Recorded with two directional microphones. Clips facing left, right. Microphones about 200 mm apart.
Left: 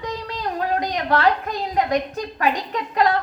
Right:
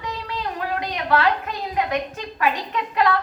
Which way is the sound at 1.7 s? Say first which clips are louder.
Left 3 dB; 40° left (ahead or behind).